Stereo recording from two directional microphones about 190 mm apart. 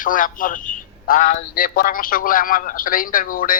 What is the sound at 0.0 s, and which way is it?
Speech, 45° left (ahead or behind).